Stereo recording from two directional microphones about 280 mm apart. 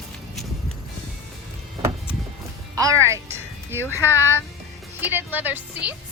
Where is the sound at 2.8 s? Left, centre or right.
Centre.